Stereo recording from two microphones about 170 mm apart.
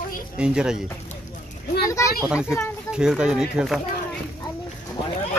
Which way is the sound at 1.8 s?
20° left (ahead or behind).